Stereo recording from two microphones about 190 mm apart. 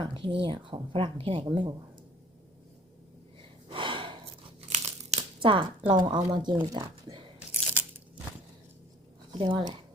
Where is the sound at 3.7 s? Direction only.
25° right (ahead or behind).